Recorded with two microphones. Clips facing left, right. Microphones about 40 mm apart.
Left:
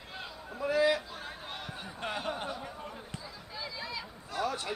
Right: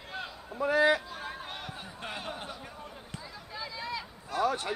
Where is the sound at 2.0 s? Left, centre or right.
Left.